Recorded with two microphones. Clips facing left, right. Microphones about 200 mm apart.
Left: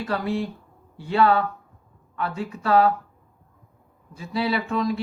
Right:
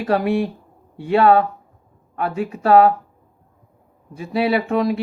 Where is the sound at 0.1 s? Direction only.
70° right (ahead or behind).